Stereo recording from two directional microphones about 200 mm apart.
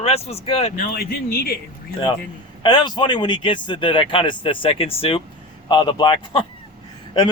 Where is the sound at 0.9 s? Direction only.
50° left (ahead or behind).